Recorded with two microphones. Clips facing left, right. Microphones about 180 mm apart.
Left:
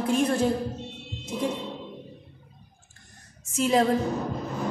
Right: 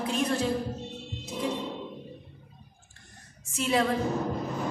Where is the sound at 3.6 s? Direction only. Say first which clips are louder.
Left 4 dB; 40° left (ahead or behind).